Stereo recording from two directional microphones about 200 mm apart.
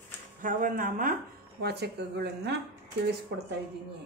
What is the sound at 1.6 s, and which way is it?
Speech, 55° right (ahead or behind).